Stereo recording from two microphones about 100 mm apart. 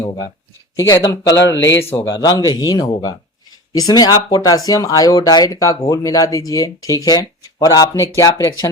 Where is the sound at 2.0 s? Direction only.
40° left (ahead or behind).